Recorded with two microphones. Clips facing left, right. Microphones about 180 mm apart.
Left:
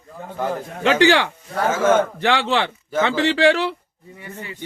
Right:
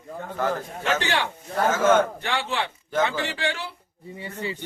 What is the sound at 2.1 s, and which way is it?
A man's voice, 90° left.